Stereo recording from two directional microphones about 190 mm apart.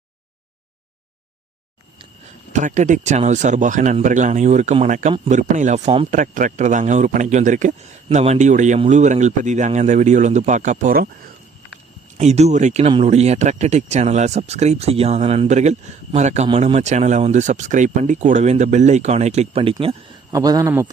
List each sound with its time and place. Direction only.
2.5 s speech: 40° right (ahead or behind)
6.1 s speech: 45° right (ahead or behind)
12.1 s speech: 35° right (ahead or behind)
20.3 s speech: 20° right (ahead or behind)